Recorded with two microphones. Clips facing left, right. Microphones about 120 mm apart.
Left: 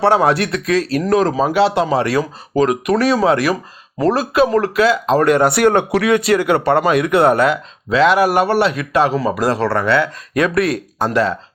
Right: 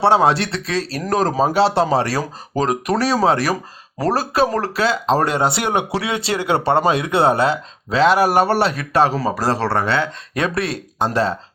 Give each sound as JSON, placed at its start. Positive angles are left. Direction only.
{"t": 0.0, "sound": "speech", "side_deg": -25}